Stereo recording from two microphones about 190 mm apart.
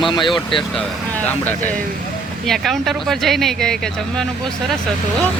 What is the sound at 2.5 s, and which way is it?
Speech, centre (ahead or behind).